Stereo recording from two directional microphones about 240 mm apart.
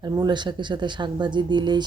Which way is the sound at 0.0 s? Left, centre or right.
Centre.